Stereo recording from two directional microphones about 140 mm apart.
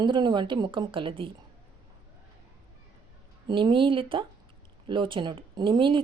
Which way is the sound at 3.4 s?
35° right (ahead or behind).